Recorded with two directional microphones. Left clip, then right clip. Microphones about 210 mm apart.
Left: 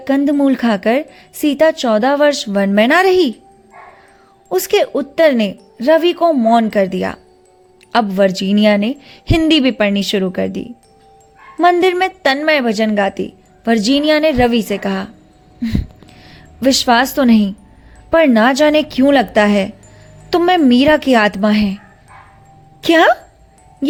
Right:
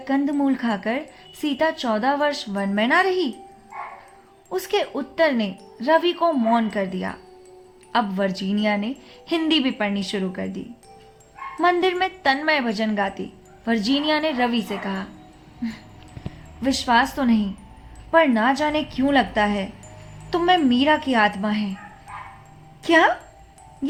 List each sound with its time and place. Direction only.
0.0 s speech: 40° left (ahead or behind)
4.4 s speech: 40° left (ahead or behind)
11.6 s speech: 40° left (ahead or behind)
16.3 s speech: 45° left (ahead or behind)
22.8 s speech: 45° left (ahead or behind)